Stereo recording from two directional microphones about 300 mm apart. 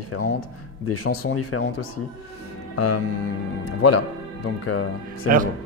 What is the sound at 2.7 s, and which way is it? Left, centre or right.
Music, left.